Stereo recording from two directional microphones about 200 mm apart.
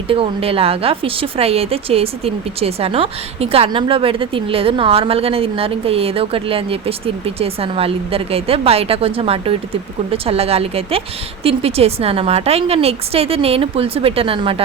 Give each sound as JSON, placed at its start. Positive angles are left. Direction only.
{"t": 0.1, "sound": "a woman's voice", "side_deg": -25}